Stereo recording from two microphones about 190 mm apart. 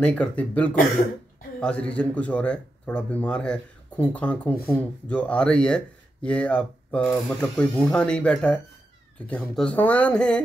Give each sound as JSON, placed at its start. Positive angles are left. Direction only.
{"t": 0.0, "sound": "speech", "side_deg": 5}